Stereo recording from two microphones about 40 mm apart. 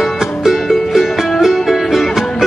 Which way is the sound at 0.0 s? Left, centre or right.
Centre.